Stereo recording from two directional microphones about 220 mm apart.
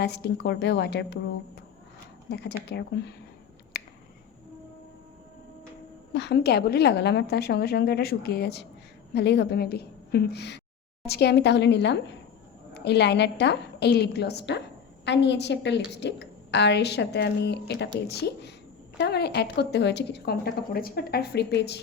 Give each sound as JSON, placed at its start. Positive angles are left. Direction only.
{"t": 0.0, "sound": "a woman's voice", "side_deg": 50}
{"t": 2.3, "sound": "a woman's voice", "side_deg": 50}
{"t": 3.7, "sound": "finger snapping", "side_deg": 45}
{"t": 6.1, "sound": "a woman's voice", "side_deg": 50}